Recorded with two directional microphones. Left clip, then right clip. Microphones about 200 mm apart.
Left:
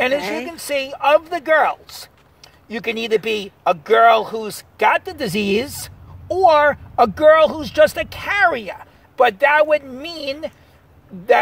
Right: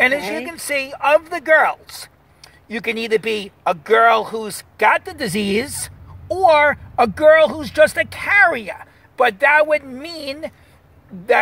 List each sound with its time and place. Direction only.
0.2 s speech: 10° left (ahead or behind)
0.5 s a child's voice: 30° left (ahead or behind)